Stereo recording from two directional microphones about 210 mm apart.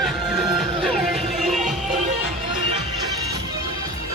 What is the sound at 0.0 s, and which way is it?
Music, centre (ahead or behind).